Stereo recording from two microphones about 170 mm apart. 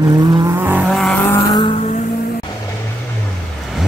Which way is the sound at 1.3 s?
20° left (ahead or behind).